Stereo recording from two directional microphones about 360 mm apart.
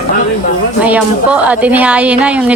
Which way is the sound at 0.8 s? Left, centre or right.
Centre.